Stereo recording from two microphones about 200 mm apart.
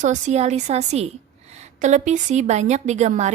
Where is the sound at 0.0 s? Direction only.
35° right (ahead or behind).